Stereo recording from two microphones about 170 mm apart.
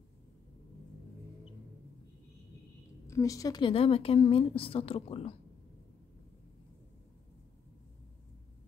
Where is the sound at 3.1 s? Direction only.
20° left (ahead or behind); by 5.3 s 35° left (ahead or behind).